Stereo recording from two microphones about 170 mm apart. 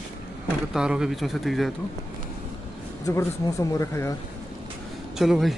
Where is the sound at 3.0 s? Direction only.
20° left (ahead or behind).